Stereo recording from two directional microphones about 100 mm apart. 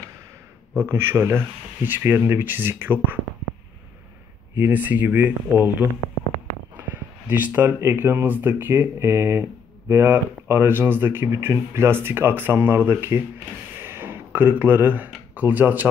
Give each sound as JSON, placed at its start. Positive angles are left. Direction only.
{"t": 0.7, "sound": "speech", "side_deg": -20}
{"t": 4.6, "sound": "speech", "side_deg": -15}
{"t": 13.7, "sound": "a sound", "side_deg": -25}
{"t": 15.3, "sound": "speech", "side_deg": -20}